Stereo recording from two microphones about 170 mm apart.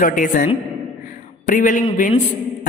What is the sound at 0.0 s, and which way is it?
A woman's voice, 50° left (ahead or behind).